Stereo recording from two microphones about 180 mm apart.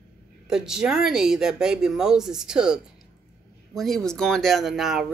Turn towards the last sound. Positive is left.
turn(degrees=0)  # may be behind; listen again after turning